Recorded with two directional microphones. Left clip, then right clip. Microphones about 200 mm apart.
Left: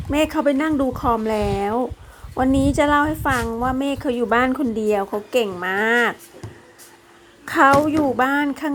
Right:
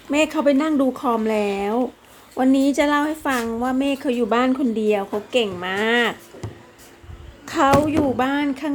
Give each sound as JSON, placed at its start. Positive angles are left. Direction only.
{"t": 0.1, "sound": "a woman's voice", "side_deg": 15}
{"t": 7.4, "sound": "a woman's voice", "side_deg": 20}